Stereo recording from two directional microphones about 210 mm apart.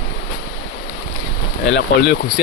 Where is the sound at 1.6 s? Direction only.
55° left (ahead or behind).